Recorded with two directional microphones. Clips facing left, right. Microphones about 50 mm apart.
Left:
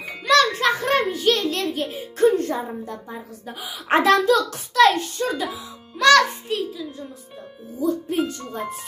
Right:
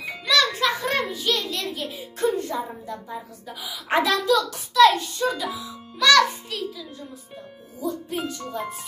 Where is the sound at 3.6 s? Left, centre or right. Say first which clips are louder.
Left 4 dB; left.